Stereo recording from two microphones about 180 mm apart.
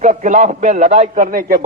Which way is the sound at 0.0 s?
45° right (ahead or behind).